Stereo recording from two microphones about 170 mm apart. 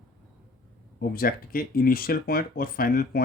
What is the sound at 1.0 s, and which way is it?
Speech, 60° left (ahead or behind).